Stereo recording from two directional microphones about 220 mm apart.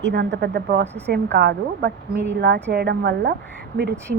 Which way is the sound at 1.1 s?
50° right (ahead or behind).